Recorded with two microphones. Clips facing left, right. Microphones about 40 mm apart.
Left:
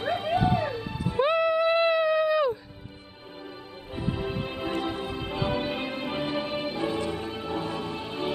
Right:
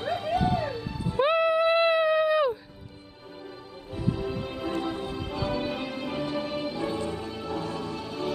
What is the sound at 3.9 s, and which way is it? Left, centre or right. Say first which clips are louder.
Music: even; left.